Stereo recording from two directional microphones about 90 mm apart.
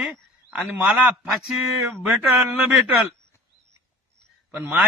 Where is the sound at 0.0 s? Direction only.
10° right (ahead or behind).